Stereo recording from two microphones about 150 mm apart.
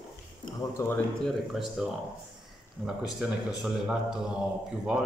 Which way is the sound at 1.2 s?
Centre (ahead or behind).